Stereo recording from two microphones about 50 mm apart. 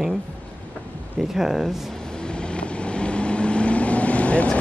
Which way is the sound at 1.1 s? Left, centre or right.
Centre.